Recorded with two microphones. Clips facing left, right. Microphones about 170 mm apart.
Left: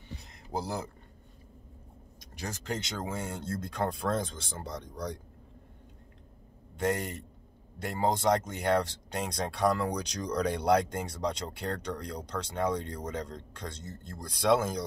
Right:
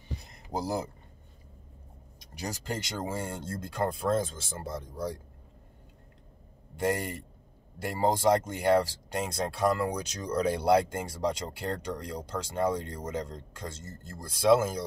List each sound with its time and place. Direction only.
0.5 s speech: 15° right (ahead or behind)
2.4 s speech: 10° right (ahead or behind)
6.8 s speech: 5° right (ahead or behind)